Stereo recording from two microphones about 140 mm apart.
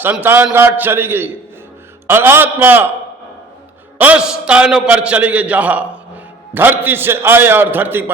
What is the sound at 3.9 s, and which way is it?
A man's voice, 10° right (ahead or behind).